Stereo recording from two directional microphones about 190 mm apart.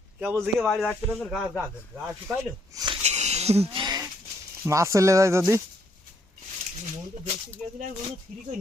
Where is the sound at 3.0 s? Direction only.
35° right (ahead or behind).